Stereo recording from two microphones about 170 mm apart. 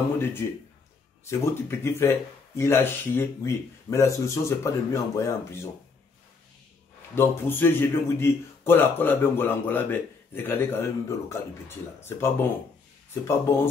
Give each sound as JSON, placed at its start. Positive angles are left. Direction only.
{"t": 0.2, "sound": "speech", "side_deg": 15}
{"t": 7.2, "sound": "speech", "side_deg": 15}